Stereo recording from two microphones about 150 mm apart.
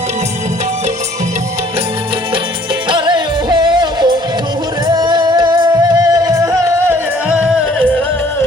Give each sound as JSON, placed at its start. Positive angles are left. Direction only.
{"t": 2.9, "sound": "music", "side_deg": -30}
{"t": 7.8, "sound": "music", "side_deg": 10}